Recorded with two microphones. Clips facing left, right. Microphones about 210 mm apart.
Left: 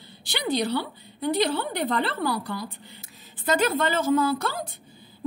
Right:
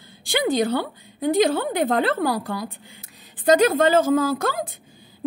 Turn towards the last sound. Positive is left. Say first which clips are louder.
# right 3 dB
turn(degrees=-50)  # may be behind; listen again after turning